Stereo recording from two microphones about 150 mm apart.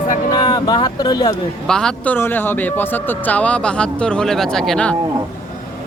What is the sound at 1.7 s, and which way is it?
Speech, 5° left (ahead or behind).